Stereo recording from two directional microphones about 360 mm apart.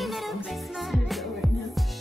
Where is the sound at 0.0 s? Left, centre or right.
Centre.